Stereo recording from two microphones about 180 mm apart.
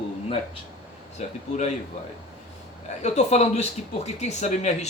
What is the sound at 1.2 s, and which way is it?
Speech, 40° left (ahead or behind).